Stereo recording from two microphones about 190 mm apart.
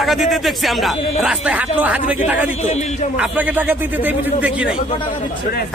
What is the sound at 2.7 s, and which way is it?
Speech, 35° left (ahead or behind).